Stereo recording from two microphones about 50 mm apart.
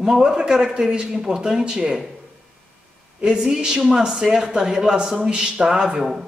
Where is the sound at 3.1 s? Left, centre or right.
Centre.